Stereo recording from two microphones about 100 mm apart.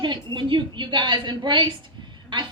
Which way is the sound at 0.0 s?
50° right (ahead or behind).